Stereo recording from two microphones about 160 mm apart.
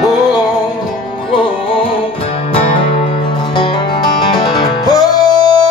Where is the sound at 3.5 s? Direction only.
30° left (ahead or behind).